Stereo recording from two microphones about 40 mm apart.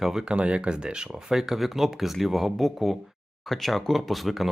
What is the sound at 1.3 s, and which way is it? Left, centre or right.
Speech, centre.